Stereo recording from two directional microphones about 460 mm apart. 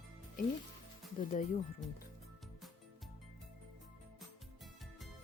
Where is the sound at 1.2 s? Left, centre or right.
Centre.